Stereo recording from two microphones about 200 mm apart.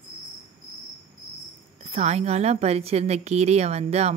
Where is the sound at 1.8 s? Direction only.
35° right (ahead or behind).